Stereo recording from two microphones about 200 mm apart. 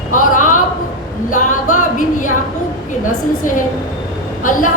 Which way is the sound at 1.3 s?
40° left (ahead or behind).